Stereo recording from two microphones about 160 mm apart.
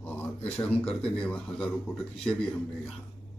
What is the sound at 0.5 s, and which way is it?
Speech, 5° left (ahead or behind).